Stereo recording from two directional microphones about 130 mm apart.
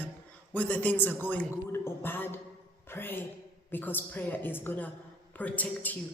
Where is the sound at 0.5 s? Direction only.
10° left (ahead or behind).